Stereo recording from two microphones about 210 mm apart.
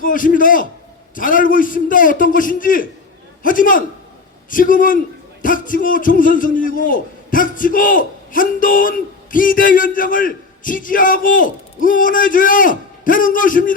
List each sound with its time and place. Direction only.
0.0 s a man's voice: 40° left (ahead or behind)